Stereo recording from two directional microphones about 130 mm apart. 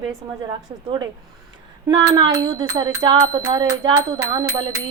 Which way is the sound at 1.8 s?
35° right (ahead or behind).